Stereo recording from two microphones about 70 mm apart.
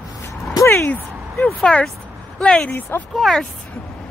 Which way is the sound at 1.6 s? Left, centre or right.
Centre.